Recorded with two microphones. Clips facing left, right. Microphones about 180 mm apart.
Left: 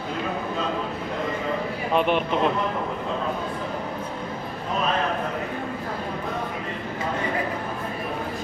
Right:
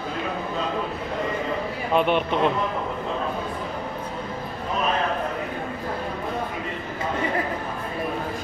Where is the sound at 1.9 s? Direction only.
Centre (ahead or behind).